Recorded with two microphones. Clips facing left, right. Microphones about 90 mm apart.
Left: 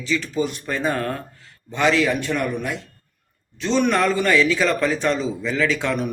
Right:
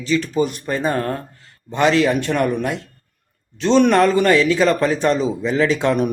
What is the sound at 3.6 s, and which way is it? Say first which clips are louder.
Speech: right 6 dB; 65° right (ahead or behind).